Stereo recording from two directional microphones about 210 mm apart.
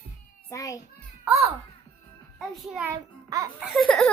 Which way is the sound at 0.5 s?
15° left (ahead or behind).